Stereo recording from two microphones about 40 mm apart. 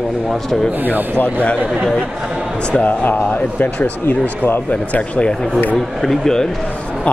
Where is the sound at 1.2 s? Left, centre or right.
Left.